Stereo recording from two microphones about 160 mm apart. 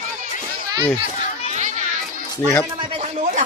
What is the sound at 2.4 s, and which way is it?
Speech, 15° left (ahead or behind).